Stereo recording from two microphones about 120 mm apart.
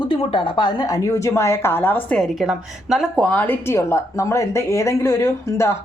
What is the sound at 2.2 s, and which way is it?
A woman's voice, 5° right (ahead or behind).